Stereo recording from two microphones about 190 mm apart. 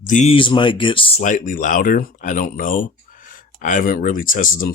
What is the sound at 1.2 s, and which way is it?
Speech, 40° left (ahead or behind).